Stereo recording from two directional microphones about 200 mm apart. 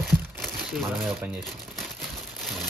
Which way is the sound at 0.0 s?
Centre (ahead or behind).